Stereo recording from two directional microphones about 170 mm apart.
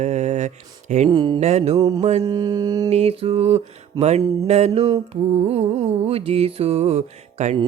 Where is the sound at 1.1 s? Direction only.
25° right (ahead or behind).